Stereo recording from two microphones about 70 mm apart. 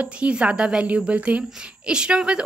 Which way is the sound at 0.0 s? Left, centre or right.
Centre.